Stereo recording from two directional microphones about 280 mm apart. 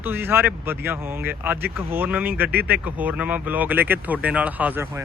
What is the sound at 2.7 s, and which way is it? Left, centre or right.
Speech, centre.